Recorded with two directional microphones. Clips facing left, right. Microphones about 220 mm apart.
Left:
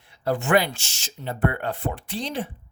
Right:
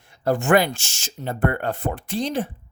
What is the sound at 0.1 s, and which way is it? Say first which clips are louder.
Speech: right 3 dB; 45° right (ahead or behind).